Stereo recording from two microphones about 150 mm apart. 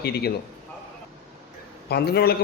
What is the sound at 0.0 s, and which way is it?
Speech, 90° left.